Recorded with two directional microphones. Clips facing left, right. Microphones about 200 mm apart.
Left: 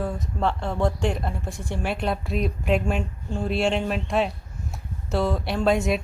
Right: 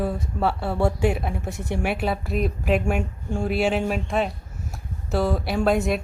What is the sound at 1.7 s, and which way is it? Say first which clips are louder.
A woman's voice: right 2 dB; 10° right (ahead or behind).